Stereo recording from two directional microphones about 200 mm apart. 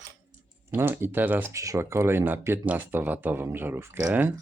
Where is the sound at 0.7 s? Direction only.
10° right (ahead or behind).